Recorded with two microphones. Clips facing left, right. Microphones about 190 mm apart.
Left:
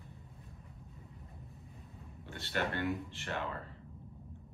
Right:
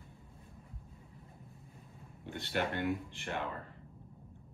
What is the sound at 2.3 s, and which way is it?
Speech, 15° right (ahead or behind).